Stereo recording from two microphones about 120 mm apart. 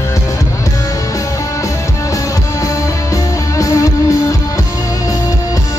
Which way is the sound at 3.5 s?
25° left (ahead or behind).